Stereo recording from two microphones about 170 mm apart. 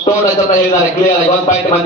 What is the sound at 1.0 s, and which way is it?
Speech, 45° left (ahead or behind).